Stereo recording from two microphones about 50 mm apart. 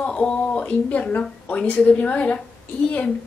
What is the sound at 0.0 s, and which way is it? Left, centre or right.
Speech, left.